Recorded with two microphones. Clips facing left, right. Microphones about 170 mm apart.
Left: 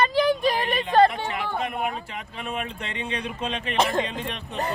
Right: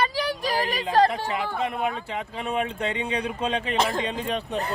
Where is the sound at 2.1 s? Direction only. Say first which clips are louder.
Right 4 dB; 30° right (ahead or behind).